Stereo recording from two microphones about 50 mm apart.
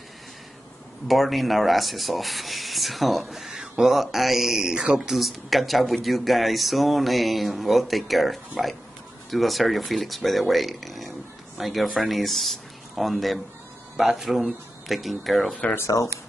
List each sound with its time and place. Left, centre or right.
1.0 s speech: centre
3.5 s a sound: centre
3.9 s speech: centre
5.1 s speech: centre
15.7 s speech: left